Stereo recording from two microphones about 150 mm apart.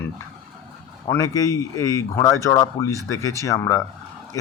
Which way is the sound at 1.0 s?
20° left (ahead or behind).